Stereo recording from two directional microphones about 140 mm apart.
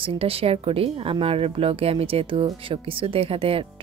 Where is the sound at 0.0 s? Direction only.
40° right (ahead or behind).